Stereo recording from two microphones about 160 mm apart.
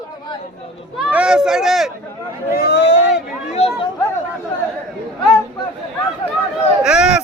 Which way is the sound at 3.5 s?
40° left (ahead or behind).